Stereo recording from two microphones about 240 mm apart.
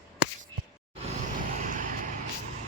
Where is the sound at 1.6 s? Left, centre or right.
Right.